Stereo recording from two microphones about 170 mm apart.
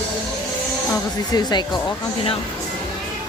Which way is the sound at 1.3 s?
25° left (ahead or behind).